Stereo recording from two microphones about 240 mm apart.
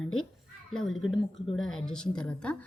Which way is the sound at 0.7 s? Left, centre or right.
Centre.